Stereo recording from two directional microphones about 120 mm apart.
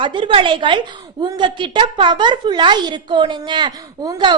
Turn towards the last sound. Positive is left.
turn(degrees=-35)  # may be behind; listen again after turning